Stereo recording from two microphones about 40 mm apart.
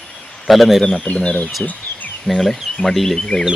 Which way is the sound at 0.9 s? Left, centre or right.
Left.